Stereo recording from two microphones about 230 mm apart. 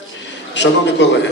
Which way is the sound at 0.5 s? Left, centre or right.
Left.